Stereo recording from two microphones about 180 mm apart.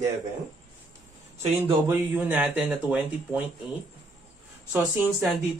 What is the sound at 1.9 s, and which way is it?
Speech, 10° right (ahead or behind).